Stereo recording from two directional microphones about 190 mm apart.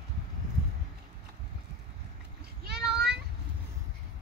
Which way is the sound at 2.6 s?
60° right (ahead or behind).